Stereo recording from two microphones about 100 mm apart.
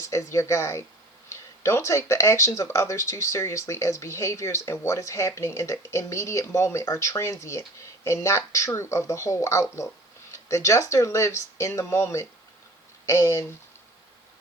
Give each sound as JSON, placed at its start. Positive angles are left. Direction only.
{"t": 0.0, "sound": "speech", "side_deg": 30}